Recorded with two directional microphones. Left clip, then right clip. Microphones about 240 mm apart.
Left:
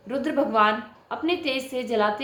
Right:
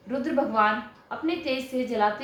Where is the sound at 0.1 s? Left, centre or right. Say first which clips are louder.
Left 2 dB; left.